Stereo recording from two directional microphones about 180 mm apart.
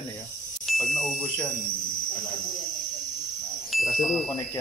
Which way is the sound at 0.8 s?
50° left (ahead or behind).